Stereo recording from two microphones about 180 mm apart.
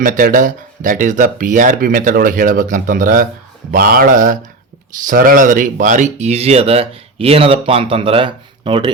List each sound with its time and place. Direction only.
0.0 s speech: 50° right (ahead or behind); by 8.9 s 30° right (ahead or behind)